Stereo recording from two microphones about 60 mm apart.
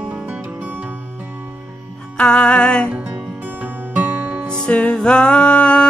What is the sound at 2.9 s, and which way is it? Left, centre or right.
Music, right.